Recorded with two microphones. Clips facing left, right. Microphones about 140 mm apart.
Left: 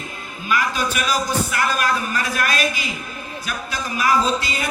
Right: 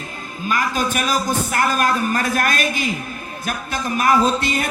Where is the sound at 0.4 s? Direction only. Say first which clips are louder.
Right 1 dB; 45° right (ahead or behind).